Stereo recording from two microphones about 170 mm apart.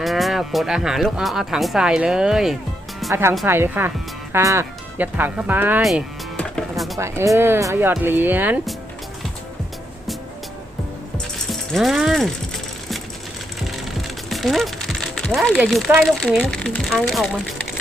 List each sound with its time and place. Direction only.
0.0 s speech: centre (ahead or behind)
3.1 s speech: 15° right (ahead or behind)
5.8 s music: 5° left (ahead or behind)
7.0 s speech: 15° right (ahead or behind)
11.7 s speech: centre (ahead or behind)
14.3 s music: centre (ahead or behind)
15.5 s speech: 5° right (ahead or behind)